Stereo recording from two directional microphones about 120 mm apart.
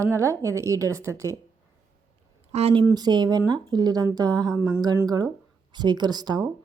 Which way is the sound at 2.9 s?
35° right (ahead or behind).